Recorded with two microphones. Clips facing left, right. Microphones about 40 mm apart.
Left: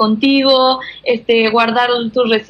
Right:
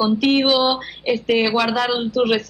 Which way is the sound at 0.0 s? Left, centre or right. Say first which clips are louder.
Left 5 dB; left.